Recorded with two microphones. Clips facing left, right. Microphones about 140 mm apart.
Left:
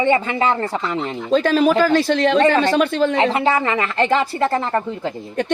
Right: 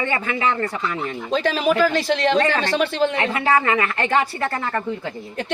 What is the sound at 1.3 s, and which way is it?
Speech, 40° left (ahead or behind).